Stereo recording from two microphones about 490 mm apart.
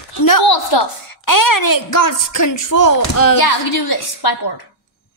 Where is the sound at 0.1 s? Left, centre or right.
Left.